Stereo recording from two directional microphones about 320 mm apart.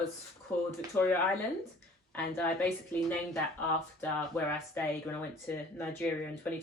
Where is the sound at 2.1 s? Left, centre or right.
Centre.